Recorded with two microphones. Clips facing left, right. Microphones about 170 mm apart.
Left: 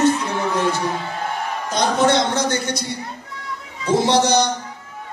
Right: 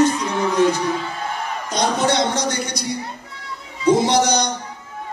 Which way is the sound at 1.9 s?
15° right (ahead or behind).